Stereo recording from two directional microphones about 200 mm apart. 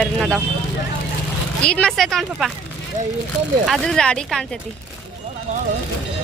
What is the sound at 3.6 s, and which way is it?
Speech, centre (ahead or behind).